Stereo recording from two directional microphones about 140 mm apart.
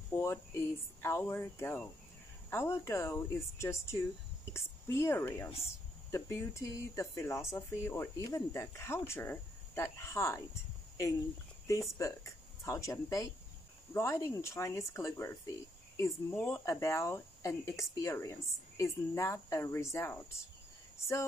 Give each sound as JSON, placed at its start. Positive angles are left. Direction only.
{"t": 0.1, "sound": "speech", "side_deg": 20}
{"t": 12.0, "sound": "speech", "side_deg": 20}